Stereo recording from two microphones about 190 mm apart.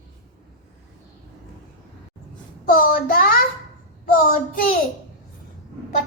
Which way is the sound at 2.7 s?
50° left (ahead or behind).